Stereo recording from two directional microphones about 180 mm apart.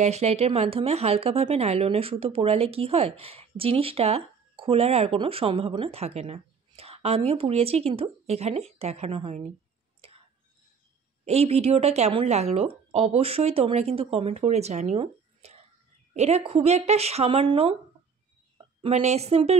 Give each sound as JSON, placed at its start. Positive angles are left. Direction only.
{"t": 0.0, "sound": "speech", "side_deg": -35}
{"t": 11.2, "sound": "speech", "side_deg": -35}
{"t": 18.8, "sound": "speech", "side_deg": -35}